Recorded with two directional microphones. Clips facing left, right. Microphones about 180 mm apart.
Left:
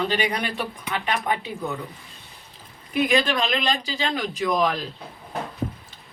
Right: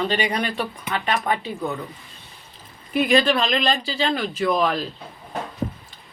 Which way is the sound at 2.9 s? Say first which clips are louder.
Right 3 dB; 10° left (ahead or behind).